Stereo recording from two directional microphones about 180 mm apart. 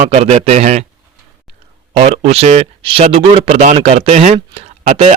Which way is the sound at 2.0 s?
40° right (ahead or behind).